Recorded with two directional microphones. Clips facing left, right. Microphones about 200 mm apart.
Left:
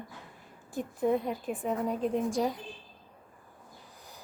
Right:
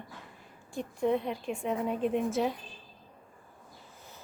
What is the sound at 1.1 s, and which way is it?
Speech, 45° left (ahead or behind).